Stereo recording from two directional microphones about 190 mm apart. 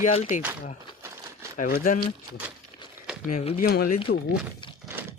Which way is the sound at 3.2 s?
40° left (ahead or behind).